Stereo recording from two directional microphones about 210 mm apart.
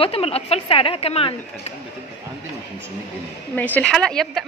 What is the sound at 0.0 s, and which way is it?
Speech, 30° left (ahead or behind).